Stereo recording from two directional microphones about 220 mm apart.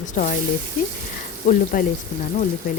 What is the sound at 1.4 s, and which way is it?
Speech, 35° left (ahead or behind).